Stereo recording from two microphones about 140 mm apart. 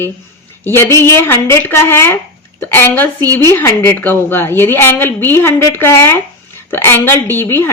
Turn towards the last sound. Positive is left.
turn(degrees=15)  # may be behind; listen again after turning